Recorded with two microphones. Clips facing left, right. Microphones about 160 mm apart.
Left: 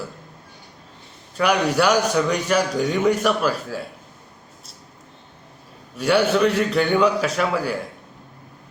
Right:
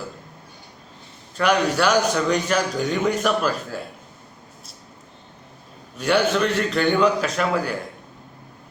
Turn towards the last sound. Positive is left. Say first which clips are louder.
# left 1 dB
turn(degrees=5)  # may be behind; listen again after turning